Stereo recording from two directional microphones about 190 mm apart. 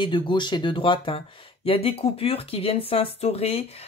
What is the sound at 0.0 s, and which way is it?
Speech, 25° left (ahead or behind).